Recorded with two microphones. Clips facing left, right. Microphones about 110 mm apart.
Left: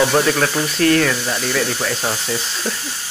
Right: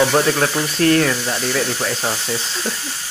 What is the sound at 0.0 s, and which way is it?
Speech, centre (ahead or behind).